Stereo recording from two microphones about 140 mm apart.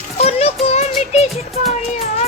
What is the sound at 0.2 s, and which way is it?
Music, 45° left (ahead or behind).